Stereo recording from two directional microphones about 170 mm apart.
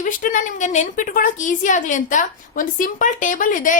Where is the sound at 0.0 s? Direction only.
50° left (ahead or behind).